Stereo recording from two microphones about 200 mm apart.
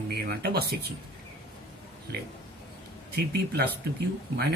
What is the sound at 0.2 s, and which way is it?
Speech, 55° right (ahead or behind).